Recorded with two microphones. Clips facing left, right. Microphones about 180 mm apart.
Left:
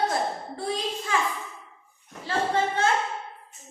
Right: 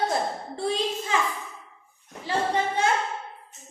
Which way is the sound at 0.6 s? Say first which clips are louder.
Right 3 dB; 25° right (ahead or behind).